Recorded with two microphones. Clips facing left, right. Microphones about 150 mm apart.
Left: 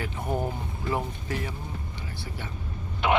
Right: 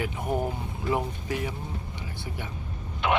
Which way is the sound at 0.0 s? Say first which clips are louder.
Right 1 dB; 10° right (ahead or behind).